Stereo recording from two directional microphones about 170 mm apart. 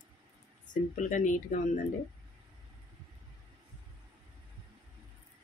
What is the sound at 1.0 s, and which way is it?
Speech, 50° left (ahead or behind).